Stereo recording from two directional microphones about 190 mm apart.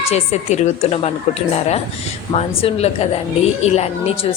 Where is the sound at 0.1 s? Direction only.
35° left (ahead or behind).